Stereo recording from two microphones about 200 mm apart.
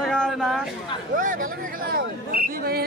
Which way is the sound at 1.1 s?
40° right (ahead or behind).